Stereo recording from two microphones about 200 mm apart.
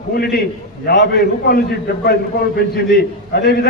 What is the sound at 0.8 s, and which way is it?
A man's voice, 55° left (ahead or behind).